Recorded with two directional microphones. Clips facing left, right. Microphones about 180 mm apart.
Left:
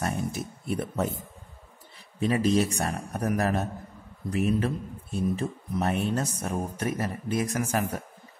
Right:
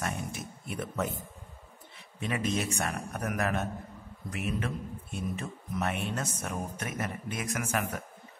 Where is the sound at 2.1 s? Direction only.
35° left (ahead or behind).